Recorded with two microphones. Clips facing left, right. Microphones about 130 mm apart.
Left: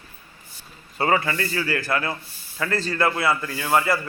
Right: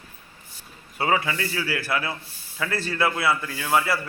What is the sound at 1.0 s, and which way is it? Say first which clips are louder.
A man's voice: left 2 dB; 5° right (ahead or behind).